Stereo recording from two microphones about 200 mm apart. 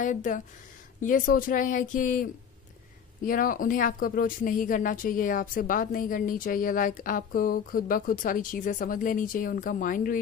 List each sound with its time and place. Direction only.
0.0 s speech: 40° left (ahead or behind)
3.3 s speech: 45° left (ahead or behind)